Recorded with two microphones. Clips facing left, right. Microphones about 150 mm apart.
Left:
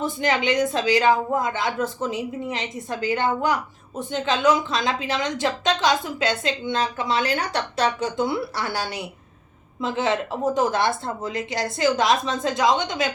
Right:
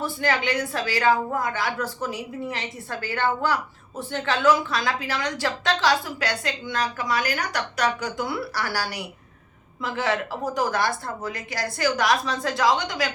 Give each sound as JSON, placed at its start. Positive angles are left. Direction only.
{"t": 0.0, "sound": "a woman's voice", "side_deg": 20}